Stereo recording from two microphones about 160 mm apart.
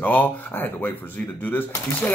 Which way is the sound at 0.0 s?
10° left (ahead or behind).